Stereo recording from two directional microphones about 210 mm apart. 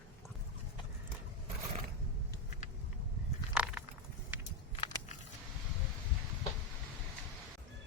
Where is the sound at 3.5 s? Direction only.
5° right (ahead or behind).